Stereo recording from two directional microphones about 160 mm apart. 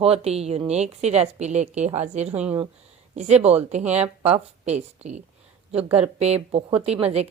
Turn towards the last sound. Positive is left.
turn(degrees=-40)  # may be behind; listen again after turning